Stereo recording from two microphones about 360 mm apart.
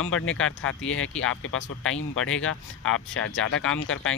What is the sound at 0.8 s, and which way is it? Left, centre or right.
Speech, left.